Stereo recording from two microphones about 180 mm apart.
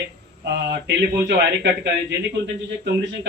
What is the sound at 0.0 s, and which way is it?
Speech, 70° right (ahead or behind).